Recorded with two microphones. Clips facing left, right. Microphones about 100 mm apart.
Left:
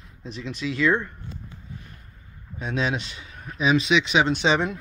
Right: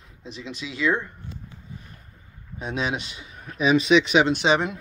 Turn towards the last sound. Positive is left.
turn(degrees=-15)  # may be behind; listen again after turning